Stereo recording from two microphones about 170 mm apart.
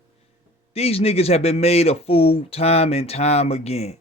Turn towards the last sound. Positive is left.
turn(degrees=40)  # may be behind; listen again after turning